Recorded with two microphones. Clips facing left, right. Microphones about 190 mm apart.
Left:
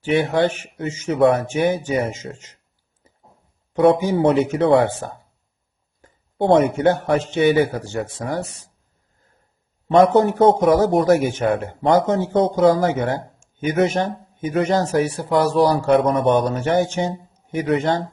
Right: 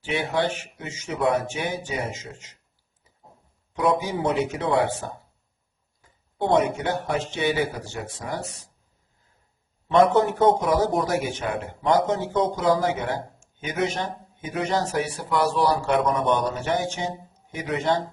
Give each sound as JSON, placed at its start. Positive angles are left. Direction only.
{"t": 0.0, "sound": "speech", "side_deg": 50}
{"t": 1.2, "sound": "speech", "side_deg": 60}
{"t": 3.8, "sound": "speech", "side_deg": 65}
{"t": 6.0, "sound": "speech", "side_deg": 55}
{"t": 9.9, "sound": "speech", "side_deg": 40}
{"t": 16.2, "sound": "a man's voice", "side_deg": 55}